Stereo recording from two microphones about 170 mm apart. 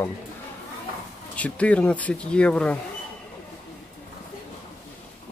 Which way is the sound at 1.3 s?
10° left (ahead or behind).